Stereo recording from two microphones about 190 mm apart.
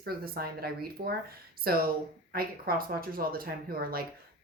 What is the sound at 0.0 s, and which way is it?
A woman's voice, 55° right (ahead or behind).